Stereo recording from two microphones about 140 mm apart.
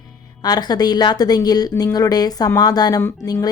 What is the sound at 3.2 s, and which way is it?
Speech, 15° left (ahead or behind).